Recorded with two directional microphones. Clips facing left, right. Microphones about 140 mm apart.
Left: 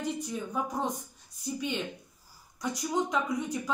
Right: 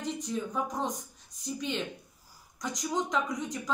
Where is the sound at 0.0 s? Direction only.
5° left (ahead or behind).